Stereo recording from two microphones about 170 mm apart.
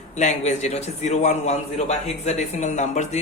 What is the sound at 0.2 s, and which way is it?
A man's voice, 45° left (ahead or behind).